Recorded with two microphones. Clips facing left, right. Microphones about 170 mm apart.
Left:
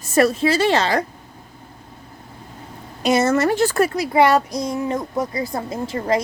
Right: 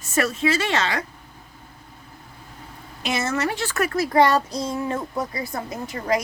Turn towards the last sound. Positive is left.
turn(degrees=30)  # may be behind; listen again after turning